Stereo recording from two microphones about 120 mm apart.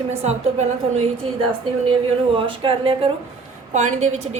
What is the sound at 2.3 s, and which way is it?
Speech, 45° right (ahead or behind).